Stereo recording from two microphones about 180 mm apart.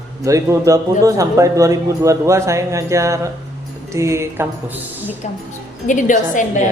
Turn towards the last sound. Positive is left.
turn(degrees=45)  # may be behind; listen again after turning